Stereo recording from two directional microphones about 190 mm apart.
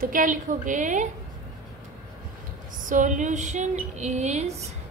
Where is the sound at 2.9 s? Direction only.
45° right (ahead or behind).